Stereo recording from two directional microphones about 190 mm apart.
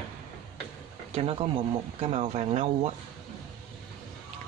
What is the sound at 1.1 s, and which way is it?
Speech, 30° right (ahead or behind).